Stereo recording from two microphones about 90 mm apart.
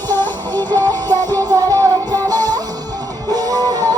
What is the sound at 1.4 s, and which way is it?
Music, 40° right (ahead or behind).